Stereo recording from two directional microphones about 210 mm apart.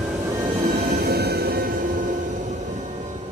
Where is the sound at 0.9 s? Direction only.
50° right (ahead or behind).